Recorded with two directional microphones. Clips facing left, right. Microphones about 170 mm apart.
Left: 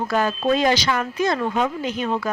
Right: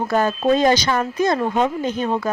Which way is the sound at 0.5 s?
45° right (ahead or behind).